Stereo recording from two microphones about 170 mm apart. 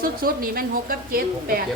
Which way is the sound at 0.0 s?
60° right (ahead or behind).